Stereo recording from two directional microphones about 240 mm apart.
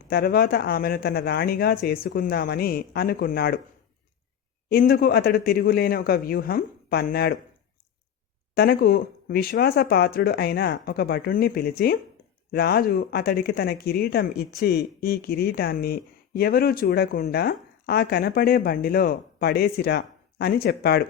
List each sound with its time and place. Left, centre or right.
0.1 s speech: left
4.7 s speech: left
8.5 s speech: left